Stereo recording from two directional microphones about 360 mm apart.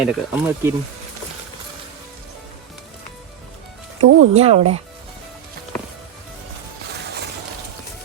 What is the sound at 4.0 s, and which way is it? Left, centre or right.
Music, right.